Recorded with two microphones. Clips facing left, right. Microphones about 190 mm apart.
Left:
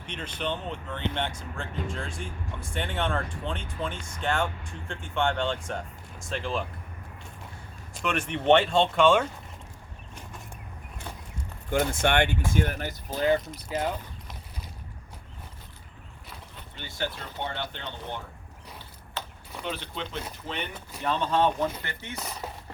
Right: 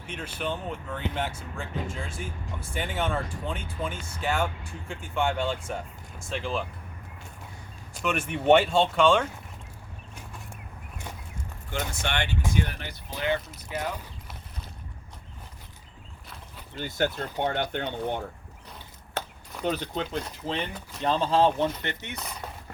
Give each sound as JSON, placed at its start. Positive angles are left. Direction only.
{"t": 0.0, "sound": "speech", "side_deg": -5}
{"t": 7.9, "sound": "speech", "side_deg": -5}
{"t": 11.7, "sound": "speech", "side_deg": 50}
{"t": 16.7, "sound": "speech", "side_deg": -45}
{"t": 19.2, "sound": "a sound", "side_deg": -45}
{"t": 19.6, "sound": "speech", "side_deg": -40}